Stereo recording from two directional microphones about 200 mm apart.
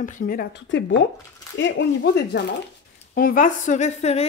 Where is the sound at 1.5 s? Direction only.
60° left (ahead or behind).